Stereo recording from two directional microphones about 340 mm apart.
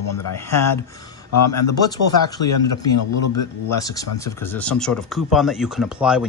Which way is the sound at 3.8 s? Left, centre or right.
Centre.